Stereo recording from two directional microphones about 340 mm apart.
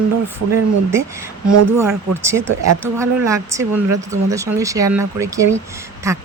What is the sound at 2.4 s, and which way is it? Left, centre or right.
Speech, right.